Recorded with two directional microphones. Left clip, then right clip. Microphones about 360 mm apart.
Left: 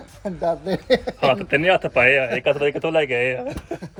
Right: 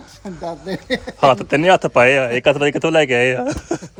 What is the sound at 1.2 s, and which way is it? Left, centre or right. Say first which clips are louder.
A man's voice: right 9 dB; centre.